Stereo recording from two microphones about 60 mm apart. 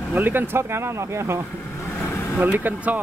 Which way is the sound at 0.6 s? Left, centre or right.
Right.